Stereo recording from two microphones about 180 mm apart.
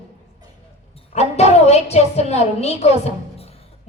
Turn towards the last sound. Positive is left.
turn(degrees=35)  # may be behind; listen again after turning